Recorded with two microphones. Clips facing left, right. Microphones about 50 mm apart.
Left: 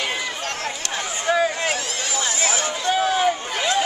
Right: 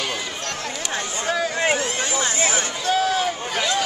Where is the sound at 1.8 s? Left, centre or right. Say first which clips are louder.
Right 3 dB; right.